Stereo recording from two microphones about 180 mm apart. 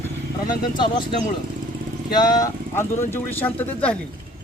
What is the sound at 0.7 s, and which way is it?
Speech, 25° left (ahead or behind).